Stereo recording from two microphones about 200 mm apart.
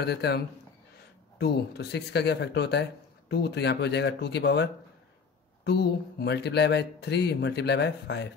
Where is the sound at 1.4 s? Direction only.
55° left (ahead or behind).